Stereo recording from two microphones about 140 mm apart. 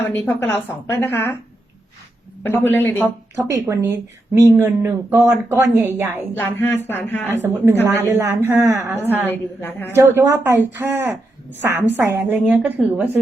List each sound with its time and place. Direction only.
0.0 s a woman's voice: 15° left (ahead or behind)
2.4 s a woman's voice: 15° left (ahead or behind)
3.3 s speech: 20° right (ahead or behind)
6.3 s a woman's voice: 15° left (ahead or behind)
7.4 s speech: 20° right (ahead or behind)
9.2 s a woman's voice: 15° left (ahead or behind)
9.9 s speech: 20° right (ahead or behind)